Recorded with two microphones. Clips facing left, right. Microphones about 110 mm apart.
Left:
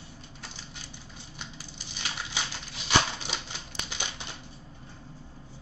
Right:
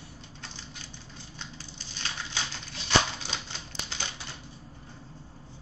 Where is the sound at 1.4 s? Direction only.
15° left (ahead or behind).